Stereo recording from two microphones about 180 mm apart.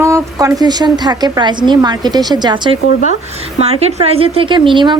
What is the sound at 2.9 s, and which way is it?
Speech, 45° left (ahead or behind).